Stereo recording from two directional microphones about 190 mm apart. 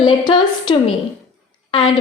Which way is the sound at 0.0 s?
25° left (ahead or behind).